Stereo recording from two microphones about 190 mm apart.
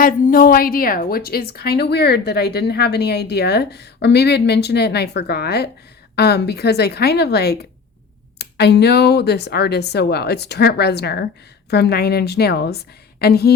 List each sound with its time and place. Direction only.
0.0 s a woman's voice: 45° left (ahead or behind)